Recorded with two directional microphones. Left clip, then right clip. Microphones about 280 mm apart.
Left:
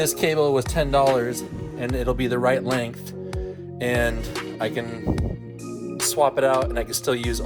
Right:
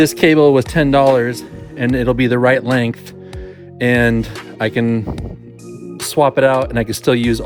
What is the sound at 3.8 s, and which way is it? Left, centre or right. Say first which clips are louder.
Speech: right 9 dB; right.